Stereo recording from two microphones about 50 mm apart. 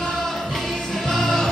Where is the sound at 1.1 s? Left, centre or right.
Centre.